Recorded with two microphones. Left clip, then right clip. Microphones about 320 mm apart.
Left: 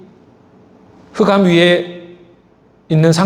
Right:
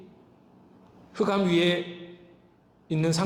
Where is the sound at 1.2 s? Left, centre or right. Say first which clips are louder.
Left 13 dB; left.